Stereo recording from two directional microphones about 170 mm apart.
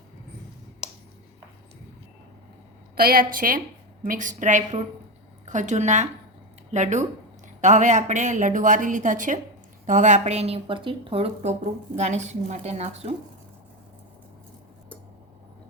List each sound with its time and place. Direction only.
2.9 s a woman's voice: 60° right (ahead or behind); by 13.1 s 40° right (ahead or behind)